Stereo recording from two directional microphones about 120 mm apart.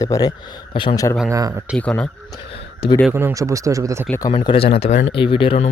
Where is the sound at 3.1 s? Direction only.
25° right (ahead or behind).